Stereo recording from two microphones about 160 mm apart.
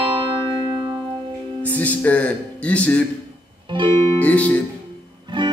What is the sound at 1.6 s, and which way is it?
Speech, 10° left (ahead or behind).